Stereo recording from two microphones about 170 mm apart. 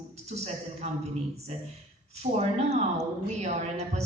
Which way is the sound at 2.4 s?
40° right (ahead or behind).